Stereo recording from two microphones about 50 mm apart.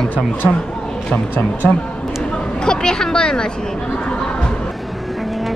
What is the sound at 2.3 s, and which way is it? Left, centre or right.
Speech, centre.